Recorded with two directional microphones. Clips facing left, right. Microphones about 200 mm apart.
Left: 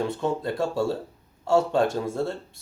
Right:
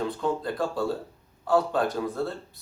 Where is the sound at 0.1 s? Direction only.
25° left (ahead or behind).